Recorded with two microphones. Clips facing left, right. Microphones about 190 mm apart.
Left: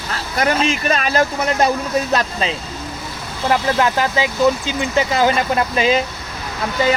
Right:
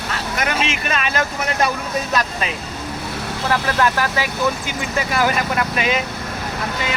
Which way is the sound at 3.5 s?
20° left (ahead or behind).